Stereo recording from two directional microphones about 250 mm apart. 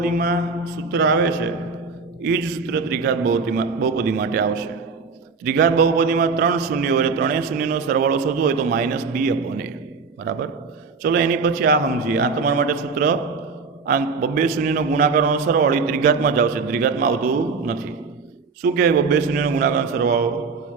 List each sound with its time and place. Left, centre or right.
0.0 s a man's voice: right
5.5 s a man's voice: right
11.0 s a man's voice: right